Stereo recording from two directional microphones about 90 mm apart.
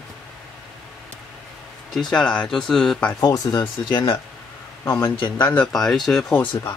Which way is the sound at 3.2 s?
45° left (ahead or behind).